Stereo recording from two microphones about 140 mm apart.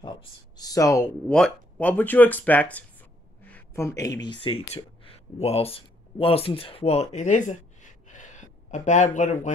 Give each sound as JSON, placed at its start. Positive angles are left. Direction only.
{"t": 0.0, "sound": "speech", "side_deg": 30}
{"t": 1.3, "sound": "speech", "side_deg": 5}